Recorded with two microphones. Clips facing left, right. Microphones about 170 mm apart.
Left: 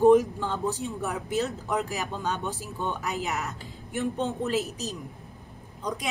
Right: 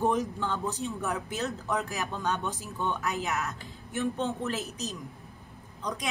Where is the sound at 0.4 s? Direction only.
15° left (ahead or behind).